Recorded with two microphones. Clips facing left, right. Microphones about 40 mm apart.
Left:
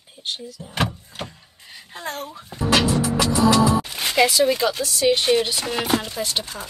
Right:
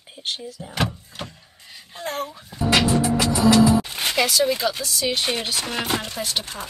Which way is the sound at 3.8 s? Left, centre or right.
Centre.